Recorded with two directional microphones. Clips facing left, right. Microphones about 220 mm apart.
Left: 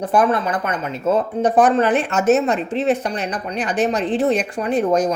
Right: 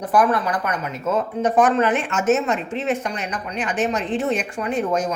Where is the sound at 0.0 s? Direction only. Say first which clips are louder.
Left 2 dB; 25° left (ahead or behind).